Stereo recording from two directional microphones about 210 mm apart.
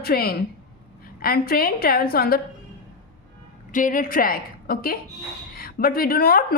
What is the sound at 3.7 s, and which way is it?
A woman's voice, 40° left (ahead or behind).